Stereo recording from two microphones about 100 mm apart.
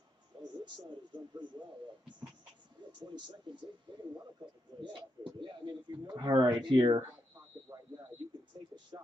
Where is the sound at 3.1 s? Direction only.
50° right (ahead or behind).